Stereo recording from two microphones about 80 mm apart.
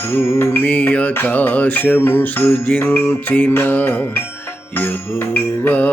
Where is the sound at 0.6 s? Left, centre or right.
Centre.